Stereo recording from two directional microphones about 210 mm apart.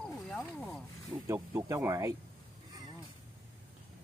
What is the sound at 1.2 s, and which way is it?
Speech, 15° right (ahead or behind).